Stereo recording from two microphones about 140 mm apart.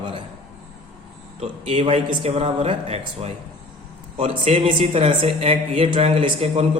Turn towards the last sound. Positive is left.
turn(degrees=-40)  # may be behind; listen again after turning